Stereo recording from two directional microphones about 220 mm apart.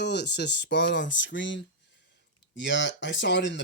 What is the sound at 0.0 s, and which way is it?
Speech, 50° left (ahead or behind).